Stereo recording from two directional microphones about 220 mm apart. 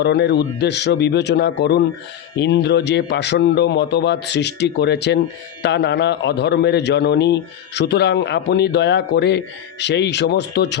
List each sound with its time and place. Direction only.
0.0 s a man's voice: 50° left (ahead or behind)